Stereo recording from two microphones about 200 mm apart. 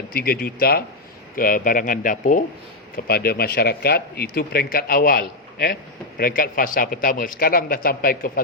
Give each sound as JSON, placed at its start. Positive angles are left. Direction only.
{"t": 0.1, "sound": "speech", "side_deg": 50}